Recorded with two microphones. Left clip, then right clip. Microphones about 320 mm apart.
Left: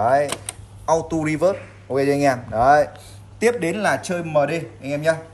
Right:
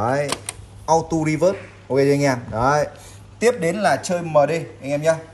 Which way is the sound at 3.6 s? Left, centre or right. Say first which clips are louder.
Right 2 dB; centre.